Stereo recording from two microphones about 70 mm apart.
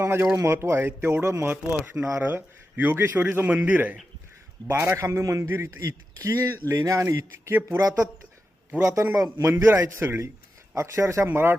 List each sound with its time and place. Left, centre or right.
0.0 s speech: right
1.7 s speech: right
4.7 s speech: right
6.7 s speech: right
7.8 s speech: right
8.8 s speech: right
11.3 s speech: right